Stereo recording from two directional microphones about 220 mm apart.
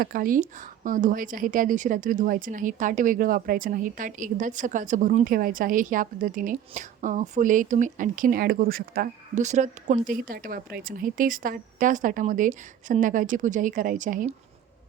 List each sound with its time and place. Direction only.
0.0 s speech: 40° right (ahead or behind)